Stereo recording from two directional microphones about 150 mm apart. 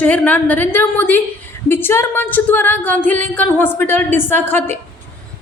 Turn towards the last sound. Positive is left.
turn(degrees=15)  # may be behind; listen again after turning